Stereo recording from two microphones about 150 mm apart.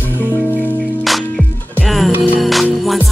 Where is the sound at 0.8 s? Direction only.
Centre (ahead or behind).